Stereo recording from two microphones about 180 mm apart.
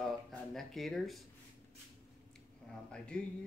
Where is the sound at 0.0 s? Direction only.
Centre (ahead or behind).